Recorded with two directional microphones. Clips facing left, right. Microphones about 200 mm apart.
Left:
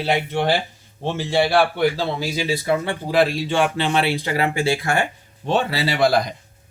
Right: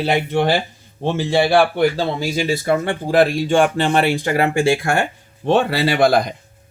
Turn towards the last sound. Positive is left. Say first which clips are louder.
# right 3 dB
turn(degrees=-55)  # may be behind; listen again after turning